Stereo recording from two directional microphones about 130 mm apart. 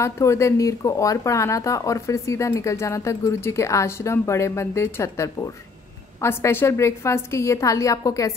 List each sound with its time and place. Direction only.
0.0 s speech: 20° left (ahead or behind)